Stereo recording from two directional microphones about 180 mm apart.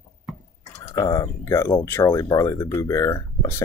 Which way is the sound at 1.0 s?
20° left (ahead or behind).